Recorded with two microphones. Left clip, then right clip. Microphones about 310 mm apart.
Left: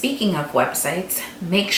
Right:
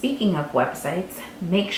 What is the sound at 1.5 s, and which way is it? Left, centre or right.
Speech, centre.